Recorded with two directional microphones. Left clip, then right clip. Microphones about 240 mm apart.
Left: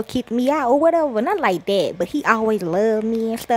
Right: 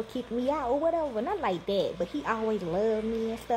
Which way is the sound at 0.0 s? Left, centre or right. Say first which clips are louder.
Left 9 dB; left.